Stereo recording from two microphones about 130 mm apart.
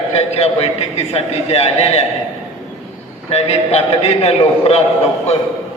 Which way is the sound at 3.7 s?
50° left (ahead or behind).